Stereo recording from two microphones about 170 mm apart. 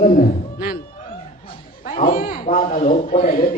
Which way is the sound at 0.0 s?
55° left (ahead or behind).